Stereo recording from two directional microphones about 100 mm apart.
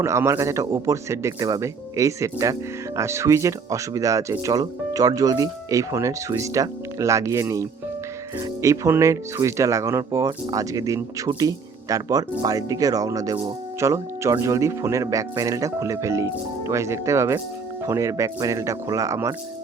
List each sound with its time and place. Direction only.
0.0 s speech: 30° right (ahead or behind)